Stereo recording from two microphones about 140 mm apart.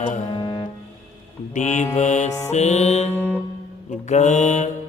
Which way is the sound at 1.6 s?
55° left (ahead or behind).